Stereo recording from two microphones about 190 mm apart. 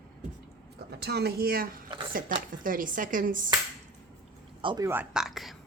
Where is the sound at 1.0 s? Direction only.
60° right (ahead or behind).